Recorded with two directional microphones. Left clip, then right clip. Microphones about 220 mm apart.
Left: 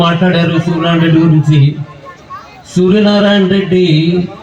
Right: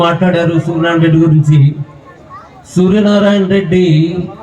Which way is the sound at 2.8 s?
35° left (ahead or behind).